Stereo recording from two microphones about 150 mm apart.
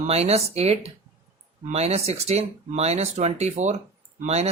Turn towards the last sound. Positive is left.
turn(degrees=-45)  # may be behind; listen again after turning